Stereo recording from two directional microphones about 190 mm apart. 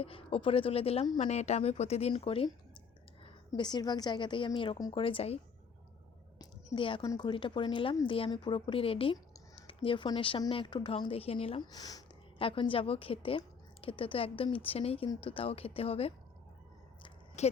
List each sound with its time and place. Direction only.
0.0 s speech: 30° left (ahead or behind)
6.7 s speech: 25° left (ahead or behind)
17.0 s a sound: 35° left (ahead or behind)